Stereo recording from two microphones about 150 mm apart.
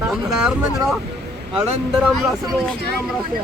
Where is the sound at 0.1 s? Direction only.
Centre (ahead or behind).